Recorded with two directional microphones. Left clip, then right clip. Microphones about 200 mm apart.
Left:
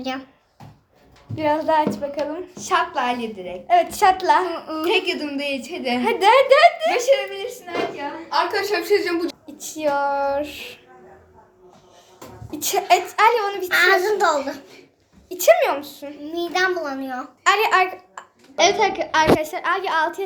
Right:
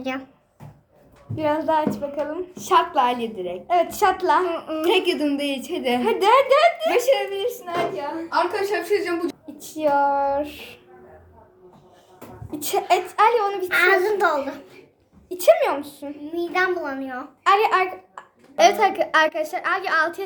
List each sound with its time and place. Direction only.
1.4 s a child's voice: centre (ahead or behind)
2.6 s a woman's voice: 30° right (ahead or behind)
3.7 s a child's voice: centre (ahead or behind)
4.9 s a woman's voice: 30° right (ahead or behind)
6.0 s a child's voice: centre (ahead or behind)
6.9 s a woman's voice: 35° right (ahead or behind)
8.3 s a woman's voice: 15° left (ahead or behind)
9.6 s a child's voice: 5° right (ahead or behind)
12.5 s a child's voice: 5° right (ahead or behind)
16.5 s a child's voice: 10° left (ahead or behind)